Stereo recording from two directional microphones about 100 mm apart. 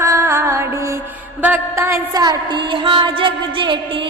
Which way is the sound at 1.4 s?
15° right (ahead or behind).